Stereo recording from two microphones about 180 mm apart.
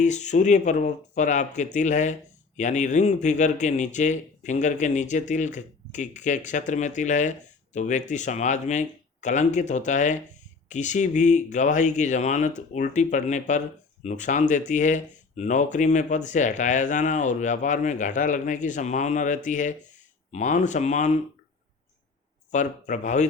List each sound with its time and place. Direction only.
0.0 s speech: 40° left (ahead or behind)
22.5 s speech: 40° left (ahead or behind)